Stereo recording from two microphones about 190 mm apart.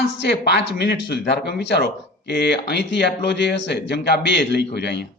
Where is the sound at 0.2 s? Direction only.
60° left (ahead or behind).